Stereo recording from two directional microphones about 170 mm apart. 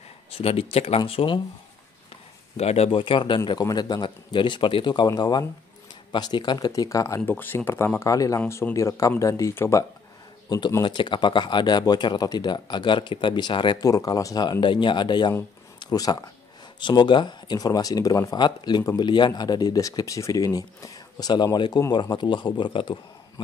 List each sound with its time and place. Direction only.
0.3 s speech: 35° left (ahead or behind)
2.5 s speech: 40° left (ahead or behind)